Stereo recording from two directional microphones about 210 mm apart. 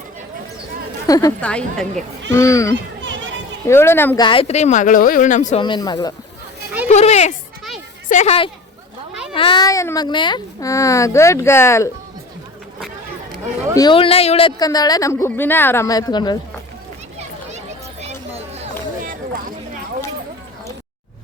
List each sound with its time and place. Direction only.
1.0 s a woman's voice: 15° left (ahead or behind)
1.4 s a woman's voice: 5° left (ahead or behind)
2.3 s a woman's voice: 15° left (ahead or behind)
4.3 s speech: 30° left (ahead or behind)
5.5 s speech: 20° left (ahead or behind)
6.8 s a woman's voice: 30° left (ahead or behind); by 11.9 s 15° left (ahead or behind)
13.7 s a woman's voice: 20° left (ahead or behind)
18.0 s a sound: 30° right (ahead or behind)